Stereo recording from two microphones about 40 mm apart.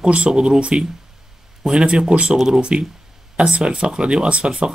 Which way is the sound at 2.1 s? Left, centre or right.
Right.